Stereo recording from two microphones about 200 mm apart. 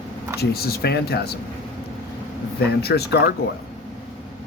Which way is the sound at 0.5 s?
50° left (ahead or behind).